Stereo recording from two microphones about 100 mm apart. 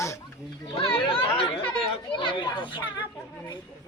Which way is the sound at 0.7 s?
60° left (ahead or behind).